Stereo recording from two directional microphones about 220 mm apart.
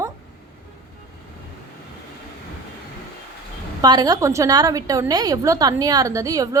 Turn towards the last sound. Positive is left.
turn(degrees=-15)  # may be behind; listen again after turning